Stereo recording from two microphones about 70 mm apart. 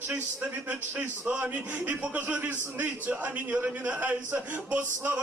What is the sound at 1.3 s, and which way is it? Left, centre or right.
A man's voice, right.